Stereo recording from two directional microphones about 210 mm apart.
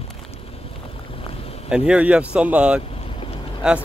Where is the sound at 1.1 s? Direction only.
25° left (ahead or behind).